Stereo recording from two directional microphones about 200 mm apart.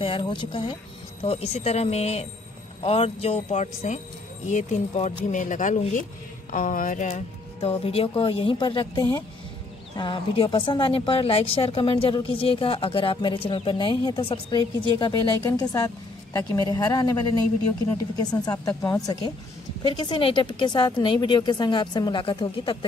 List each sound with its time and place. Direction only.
0.0 s a woman's voice: 25° left (ahead or behind)